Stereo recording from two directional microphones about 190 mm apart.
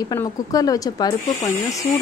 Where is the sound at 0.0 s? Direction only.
20° left (ahead or behind).